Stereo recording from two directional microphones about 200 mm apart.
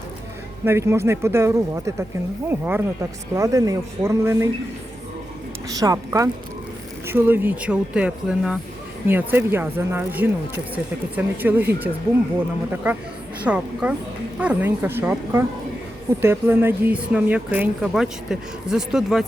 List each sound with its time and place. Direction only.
0.6 s speech: 15° right (ahead or behind)
5.6 s speech: 15° right (ahead or behind)
12.7 s speech: 10° right (ahead or behind)